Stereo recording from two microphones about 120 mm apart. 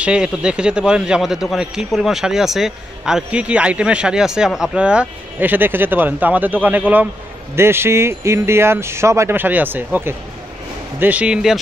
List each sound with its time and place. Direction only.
0.0 s speech: 10° right (ahead or behind)